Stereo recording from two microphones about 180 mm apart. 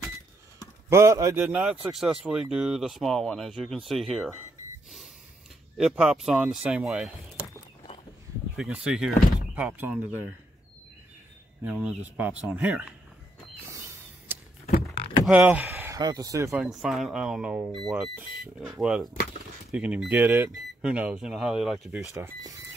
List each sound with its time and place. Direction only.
0.8 s speech: 15° right (ahead or behind); by 4.4 s centre (ahead or behind)
5.8 s speech: 5° right (ahead or behind)
8.5 s speech: 5° right (ahead or behind)
11.6 s speech: 5° right (ahead or behind)
13.7 s a sound: 15° right (ahead or behind)
15.2 s speech: 10° right (ahead or behind)
16.5 s speech: 5° right (ahead or behind)
22.1 s speech: 20° right (ahead or behind)